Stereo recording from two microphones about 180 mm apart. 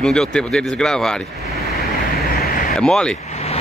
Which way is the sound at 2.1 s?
60° left (ahead or behind).